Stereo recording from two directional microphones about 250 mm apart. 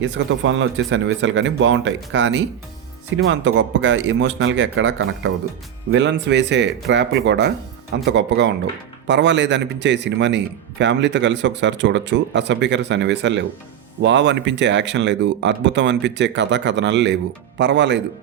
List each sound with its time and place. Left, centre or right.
0.0 s speech: right